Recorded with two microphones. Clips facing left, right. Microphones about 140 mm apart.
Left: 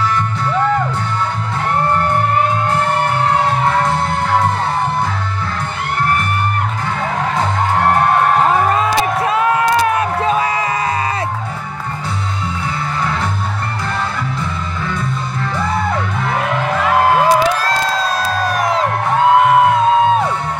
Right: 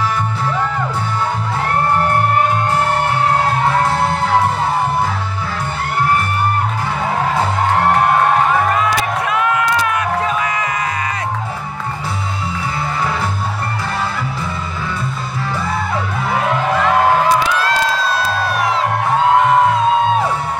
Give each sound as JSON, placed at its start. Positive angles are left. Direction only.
{"t": 9.2, "sound": "music", "side_deg": 30}
{"t": 17.6, "sound": "crowd", "side_deg": 40}